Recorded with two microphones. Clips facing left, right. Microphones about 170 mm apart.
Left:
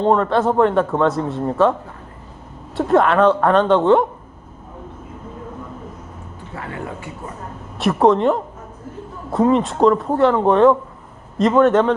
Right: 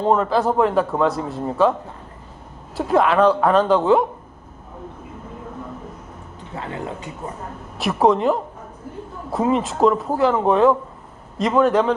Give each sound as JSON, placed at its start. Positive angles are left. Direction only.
{"t": 0.0, "sound": "a man's voice", "side_deg": -5}
{"t": 2.7, "sound": "a man's voice", "side_deg": 0}
{"t": 6.6, "sound": "speech", "side_deg": -20}
{"t": 7.8, "sound": "a man's voice", "side_deg": 0}